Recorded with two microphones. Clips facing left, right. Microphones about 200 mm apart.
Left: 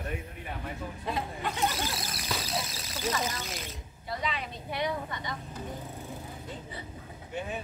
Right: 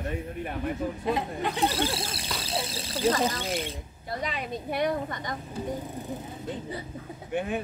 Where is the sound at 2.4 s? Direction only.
30° right (ahead or behind); by 5.4 s 45° right (ahead or behind).